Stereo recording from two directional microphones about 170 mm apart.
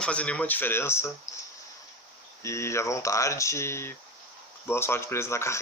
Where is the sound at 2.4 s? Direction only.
15° left (ahead or behind).